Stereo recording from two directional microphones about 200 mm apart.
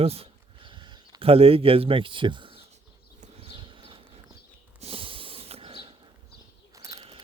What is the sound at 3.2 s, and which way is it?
Horse, 25° right (ahead or behind).